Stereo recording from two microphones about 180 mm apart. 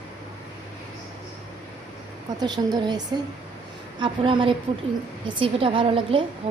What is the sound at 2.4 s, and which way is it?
A woman's voice, 25° right (ahead or behind).